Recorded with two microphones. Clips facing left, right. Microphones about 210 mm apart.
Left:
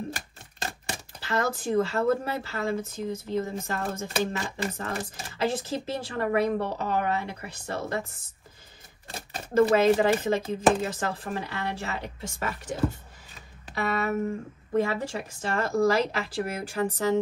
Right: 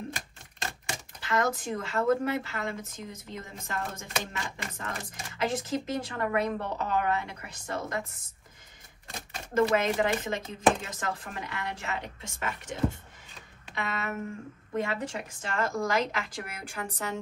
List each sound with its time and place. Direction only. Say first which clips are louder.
0.8 s speech: left 1 dB; 35° left (ahead or behind)
9.3 s speech: left 4 dB; 30° left (ahead or behind)
13.7 s speech: left 7 dB; 35° left (ahead or behind)